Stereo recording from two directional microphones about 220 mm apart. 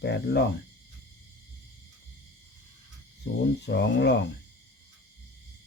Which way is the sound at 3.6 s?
50° left (ahead or behind).